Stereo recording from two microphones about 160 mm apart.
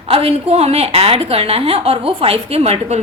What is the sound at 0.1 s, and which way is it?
A woman's voice, 40° right (ahead or behind).